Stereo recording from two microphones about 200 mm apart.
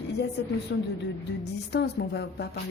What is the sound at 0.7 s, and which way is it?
A woman's voice, 60° left (ahead or behind).